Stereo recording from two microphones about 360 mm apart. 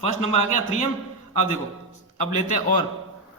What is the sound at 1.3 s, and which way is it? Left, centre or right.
Speech, centre.